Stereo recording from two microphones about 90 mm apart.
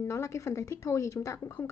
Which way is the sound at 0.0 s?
35° left (ahead or behind).